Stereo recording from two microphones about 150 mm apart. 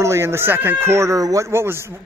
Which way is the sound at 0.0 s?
20° right (ahead or behind).